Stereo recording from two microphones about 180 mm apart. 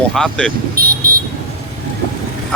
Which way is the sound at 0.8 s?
55° right (ahead or behind).